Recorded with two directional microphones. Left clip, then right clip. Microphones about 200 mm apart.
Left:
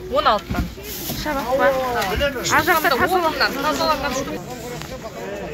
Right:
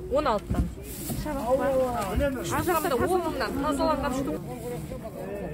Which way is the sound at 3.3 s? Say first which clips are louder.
Left 8 dB; 65° right (ahead or behind).